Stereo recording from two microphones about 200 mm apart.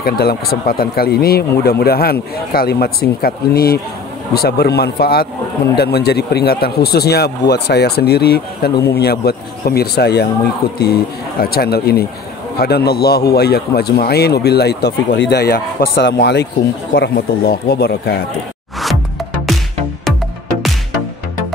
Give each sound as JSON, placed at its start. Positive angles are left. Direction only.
{"t": 0.0, "sound": "a man's voice", "side_deg": 50}